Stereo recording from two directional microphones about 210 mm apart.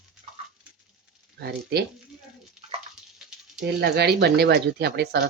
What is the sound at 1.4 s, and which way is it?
Speech, 50° right (ahead or behind).